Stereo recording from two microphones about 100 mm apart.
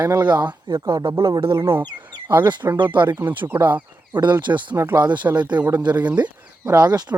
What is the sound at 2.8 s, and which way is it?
Speech, 50° right (ahead or behind).